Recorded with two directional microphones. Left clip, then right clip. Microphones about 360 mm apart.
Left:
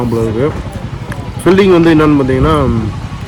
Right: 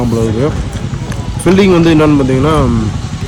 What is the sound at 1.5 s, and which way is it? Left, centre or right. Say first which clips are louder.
Speech: even; centre.